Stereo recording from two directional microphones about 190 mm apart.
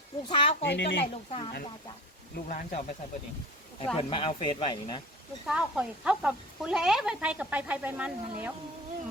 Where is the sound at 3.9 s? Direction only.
25° left (ahead or behind).